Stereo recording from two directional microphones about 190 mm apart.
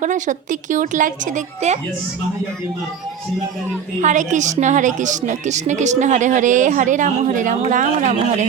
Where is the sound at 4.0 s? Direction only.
40° right (ahead or behind).